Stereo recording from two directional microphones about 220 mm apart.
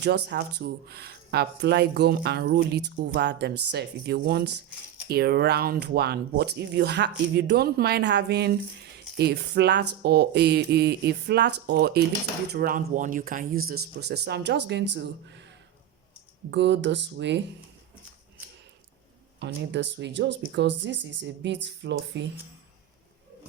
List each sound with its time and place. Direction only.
0.0 s speech: 50° right (ahead or behind)
16.5 s speech: 55° right (ahead or behind)
19.4 s speech: 55° right (ahead or behind)